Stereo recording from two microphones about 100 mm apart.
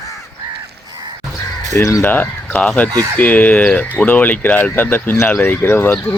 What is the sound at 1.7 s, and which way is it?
Speech, 30° left (ahead or behind).